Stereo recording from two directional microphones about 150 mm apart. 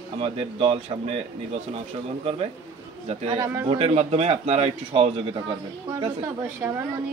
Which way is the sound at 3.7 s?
40° right (ahead or behind).